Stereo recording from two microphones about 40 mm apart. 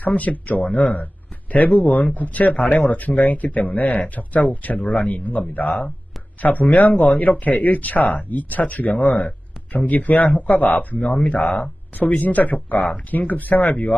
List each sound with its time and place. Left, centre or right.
0.0 s speech: left
10.6 s speech: left